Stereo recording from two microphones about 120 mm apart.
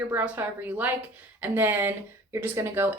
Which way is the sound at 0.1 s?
15° right (ahead or behind).